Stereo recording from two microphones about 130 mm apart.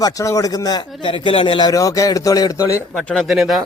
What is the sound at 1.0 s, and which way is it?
A man's voice, 40° left (ahead or behind).